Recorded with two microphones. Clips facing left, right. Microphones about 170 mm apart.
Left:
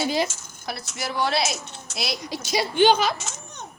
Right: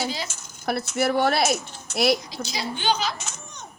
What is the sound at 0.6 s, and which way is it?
Speech, 55° right (ahead or behind).